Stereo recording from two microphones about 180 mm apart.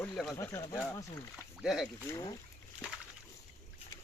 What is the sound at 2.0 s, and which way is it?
Speech, 15° left (ahead or behind).